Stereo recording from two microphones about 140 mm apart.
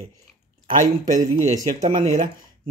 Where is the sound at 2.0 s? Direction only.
75° right (ahead or behind).